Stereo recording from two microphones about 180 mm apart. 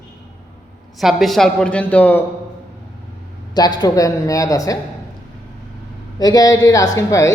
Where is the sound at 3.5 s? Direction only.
25° left (ahead or behind).